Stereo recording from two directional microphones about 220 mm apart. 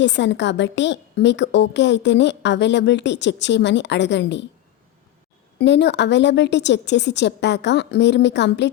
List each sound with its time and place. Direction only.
0.0 s a woman's voice: 55° left (ahead or behind)
5.5 s a woman's voice: 50° left (ahead or behind)